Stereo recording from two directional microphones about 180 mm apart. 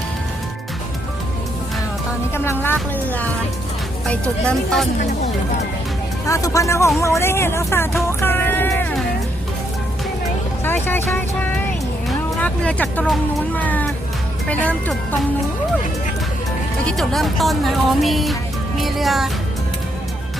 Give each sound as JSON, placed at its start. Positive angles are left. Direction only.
{"t": 2.3, "sound": "music", "side_deg": 15}
{"t": 4.0, "sound": "speech", "side_deg": 5}
{"t": 6.2, "sound": "speech", "side_deg": 15}
{"t": 8.2, "sound": "music", "side_deg": 10}
{"t": 10.6, "sound": "speech", "side_deg": 10}
{"t": 16.8, "sound": "speech", "side_deg": 0}